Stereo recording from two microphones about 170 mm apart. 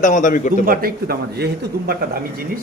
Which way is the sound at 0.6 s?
60° right (ahead or behind).